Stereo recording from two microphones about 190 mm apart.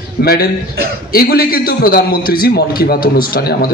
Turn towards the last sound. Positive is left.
turn(degrees=55)  # may be behind; listen again after turning